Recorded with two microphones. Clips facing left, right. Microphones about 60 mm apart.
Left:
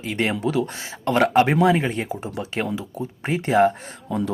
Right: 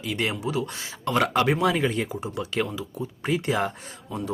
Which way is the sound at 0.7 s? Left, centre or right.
Left.